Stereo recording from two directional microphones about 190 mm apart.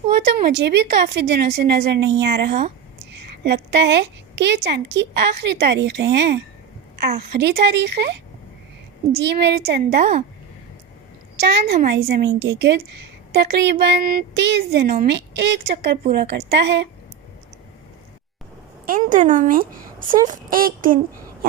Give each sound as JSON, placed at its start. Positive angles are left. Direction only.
{"t": 0.2, "sound": "a woman's voice", "side_deg": -60}
{"t": 11.3, "sound": "a woman's voice", "side_deg": -60}
{"t": 18.9, "sound": "speech", "side_deg": -45}